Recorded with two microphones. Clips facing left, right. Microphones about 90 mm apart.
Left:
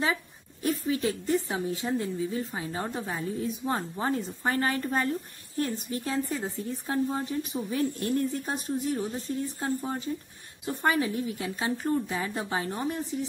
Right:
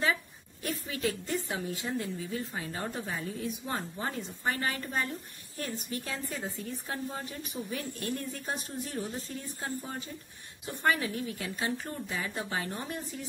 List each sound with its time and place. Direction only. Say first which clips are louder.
0.0 s a sound: left 1 dB; 25° left (ahead or behind)
1.2 s a woman's voice: left 6 dB; 30° left (ahead or behind)
5.6 s a woman's voice: left 6 dB; 25° left (ahead or behind)
9.8 s a woman's voice: left 7 dB; 30° left (ahead or behind)